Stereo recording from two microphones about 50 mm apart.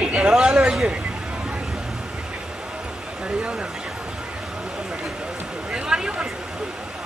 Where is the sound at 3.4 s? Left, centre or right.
Centre.